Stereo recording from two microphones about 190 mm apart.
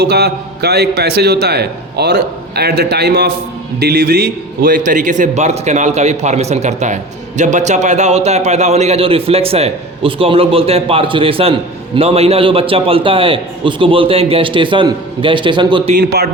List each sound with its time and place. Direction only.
0.0 s a man's voice: 60° right (ahead or behind); by 16.0 s 25° right (ahead or behind)
16.0 s a man's voice: 60° right (ahead or behind)